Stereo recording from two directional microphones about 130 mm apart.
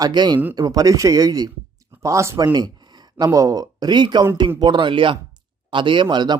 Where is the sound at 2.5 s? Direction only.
35° right (ahead or behind).